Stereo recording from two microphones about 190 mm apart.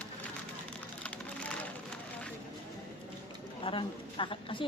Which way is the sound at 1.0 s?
5° left (ahead or behind).